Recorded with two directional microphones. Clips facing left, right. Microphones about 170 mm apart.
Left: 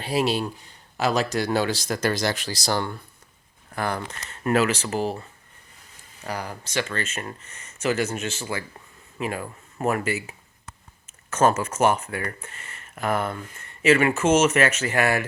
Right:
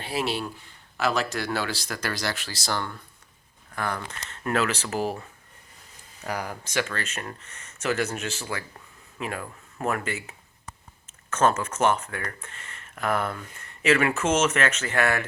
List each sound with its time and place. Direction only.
0.3 s speech: 15° left (ahead or behind)
3.8 s speech: 30° left (ahead or behind)
4.3 s speech: 5° left (ahead or behind)
6.2 s speech: centre (ahead or behind)